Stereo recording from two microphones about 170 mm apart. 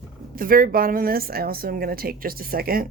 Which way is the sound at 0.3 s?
55° right (ahead or behind).